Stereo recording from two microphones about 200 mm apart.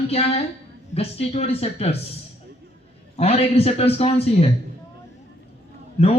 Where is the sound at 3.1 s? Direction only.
30° left (ahead or behind).